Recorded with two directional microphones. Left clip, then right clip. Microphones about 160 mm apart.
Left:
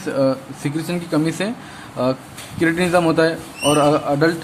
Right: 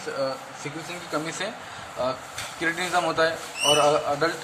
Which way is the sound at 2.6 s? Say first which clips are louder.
Left 8 dB; 35° left (ahead or behind).